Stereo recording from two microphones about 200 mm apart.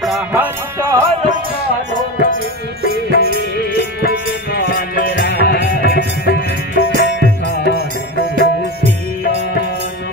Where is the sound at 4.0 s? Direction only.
55° left (ahead or behind).